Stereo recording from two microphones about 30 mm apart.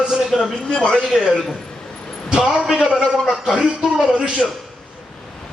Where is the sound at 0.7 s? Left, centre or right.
Left.